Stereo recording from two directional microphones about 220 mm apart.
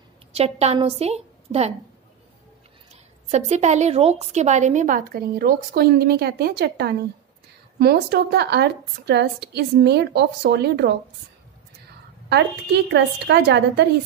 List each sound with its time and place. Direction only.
0.3 s a woman's voice: 30° right (ahead or behind)
2.9 s a woman's voice: 30° right (ahead or behind); by 11.0 s 50° right (ahead or behind)
12.3 s a woman's voice: 50° right (ahead or behind)